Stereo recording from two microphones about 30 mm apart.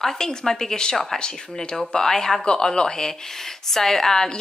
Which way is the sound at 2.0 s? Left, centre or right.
Centre.